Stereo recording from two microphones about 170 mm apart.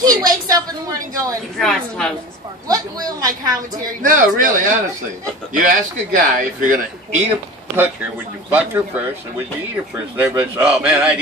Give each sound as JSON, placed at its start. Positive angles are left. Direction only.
{"t": 0.0, "sound": "a woman's voice", "side_deg": -20}
{"t": 1.6, "sound": "a woman's voice", "side_deg": 5}
{"t": 2.7, "sound": "a woman's voice", "side_deg": -20}
{"t": 4.0, "sound": "speech", "side_deg": -50}
{"t": 5.6, "sound": "speech", "side_deg": -50}
{"t": 7.7, "sound": "speech", "side_deg": -10}
{"t": 10.1, "sound": "speech", "side_deg": -10}